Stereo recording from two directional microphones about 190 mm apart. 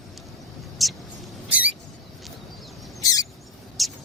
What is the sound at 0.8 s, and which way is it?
Mouse, centre (ahead or behind).